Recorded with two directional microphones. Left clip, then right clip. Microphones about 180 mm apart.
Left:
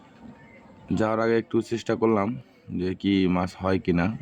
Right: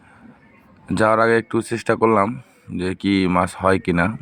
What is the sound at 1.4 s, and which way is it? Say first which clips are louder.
Speech: right 6 dB; 25° right (ahead or behind).